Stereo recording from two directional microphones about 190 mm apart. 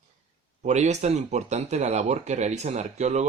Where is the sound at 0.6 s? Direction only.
35° right (ahead or behind).